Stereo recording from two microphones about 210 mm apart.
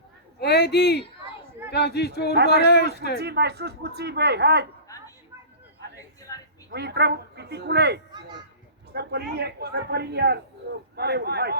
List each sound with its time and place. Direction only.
0.3 s speech: 50° left (ahead or behind)
3.2 s speech: 50° right (ahead or behind)
6.7 s speech: 50° right (ahead or behind)
8.1 s children playing: 20° right (ahead or behind)
8.9 s a man's voice: 50° right (ahead or behind)